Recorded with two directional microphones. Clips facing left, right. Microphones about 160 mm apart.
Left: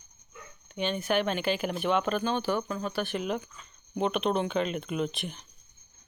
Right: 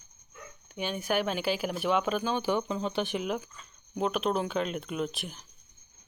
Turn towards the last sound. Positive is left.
turn(degrees=0)  # may be behind; listen again after turning